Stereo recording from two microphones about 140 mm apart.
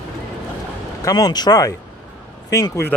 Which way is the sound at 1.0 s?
30° left (ahead or behind).